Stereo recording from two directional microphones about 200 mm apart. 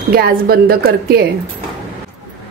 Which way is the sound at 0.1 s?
50° right (ahead or behind).